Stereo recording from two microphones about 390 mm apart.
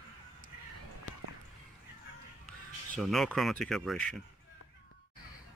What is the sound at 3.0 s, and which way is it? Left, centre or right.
Speech, centre.